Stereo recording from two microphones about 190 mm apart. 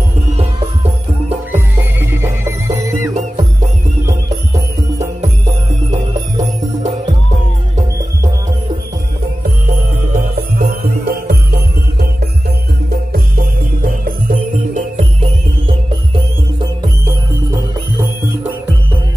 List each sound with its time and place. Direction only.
1.5 s music: 10° right (ahead or behind)
9.4 s music: 50° right (ahead or behind)
16.5 s music: 20° right (ahead or behind)